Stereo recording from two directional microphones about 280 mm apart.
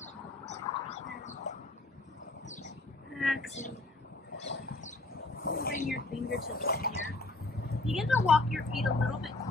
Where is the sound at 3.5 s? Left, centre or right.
Left.